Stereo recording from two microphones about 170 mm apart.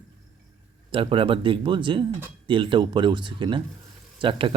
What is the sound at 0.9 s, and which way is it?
Speech, 30° right (ahead or behind).